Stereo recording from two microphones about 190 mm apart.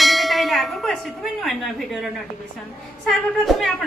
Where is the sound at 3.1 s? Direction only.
Centre (ahead or behind).